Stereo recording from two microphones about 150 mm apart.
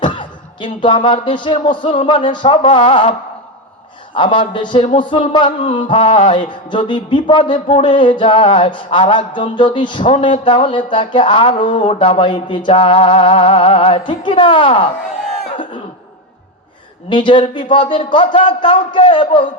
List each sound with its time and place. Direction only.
0.0 s speech: 30° left (ahead or behind)
15.5 s cough: 30° left (ahead or behind)
17.1 s speech: 30° left (ahead or behind)